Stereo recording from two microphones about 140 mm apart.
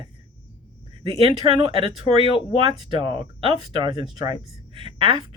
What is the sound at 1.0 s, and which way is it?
A woman's voice, 35° right (ahead or behind).